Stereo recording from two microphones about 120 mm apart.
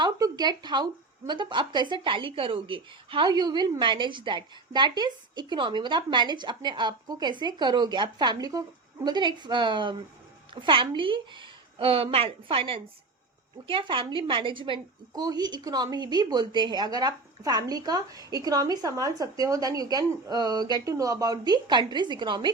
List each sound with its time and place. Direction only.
0.0 s a woman's voice: 35° right (ahead or behind)